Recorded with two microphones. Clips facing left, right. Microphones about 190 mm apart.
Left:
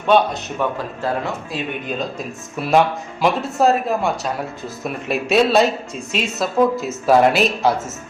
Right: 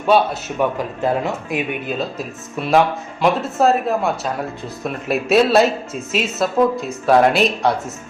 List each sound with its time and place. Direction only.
0.1 s a man's voice: 5° right (ahead or behind)
1.0 s speech: 20° right (ahead or behind)
1.9 s speech: 5° right (ahead or behind)